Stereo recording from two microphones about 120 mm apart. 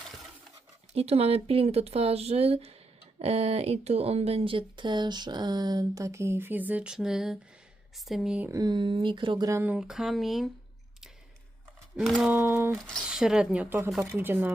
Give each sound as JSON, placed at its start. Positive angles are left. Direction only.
{"t": 0.9, "sound": "speech", "side_deg": -60}
{"t": 8.4, "sound": "speech", "side_deg": -30}
{"t": 9.6, "sound": "speech", "side_deg": -5}
{"t": 11.9, "sound": "speech", "side_deg": 0}
{"t": 12.3, "sound": "speech", "side_deg": -15}
{"t": 13.1, "sound": "speech", "side_deg": -5}